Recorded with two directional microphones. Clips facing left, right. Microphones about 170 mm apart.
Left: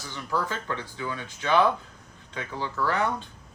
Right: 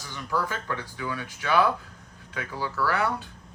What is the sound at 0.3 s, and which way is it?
Speech, 15° left (ahead or behind).